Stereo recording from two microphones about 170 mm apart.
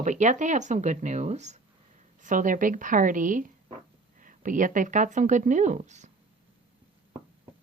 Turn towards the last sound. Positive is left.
turn(degrees=-45)  # may be behind; listen again after turning